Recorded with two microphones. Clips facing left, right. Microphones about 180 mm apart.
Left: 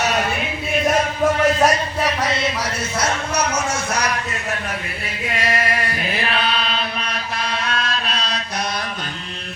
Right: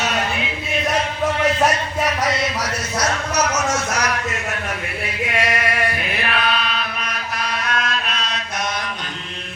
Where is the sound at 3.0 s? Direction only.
30° left (ahead or behind).